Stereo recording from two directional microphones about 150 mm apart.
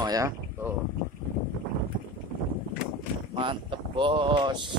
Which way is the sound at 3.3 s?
35° right (ahead or behind).